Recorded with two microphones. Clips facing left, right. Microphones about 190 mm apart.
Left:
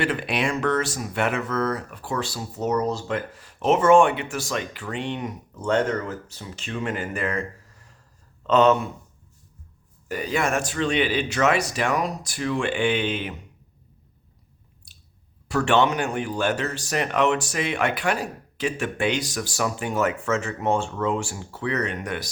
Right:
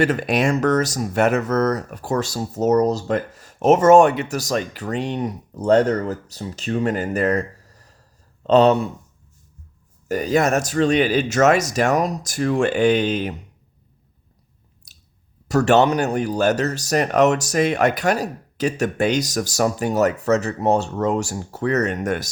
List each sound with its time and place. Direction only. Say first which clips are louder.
0.0 s speech: right 6 dB; 45° right (ahead or behind)
10.1 s speech: right 6 dB; 40° right (ahead or behind)
14.9 s a sound: left 1 dB; 40° right (ahead or behind)
15.4 s speech: right 5 dB; 40° right (ahead or behind)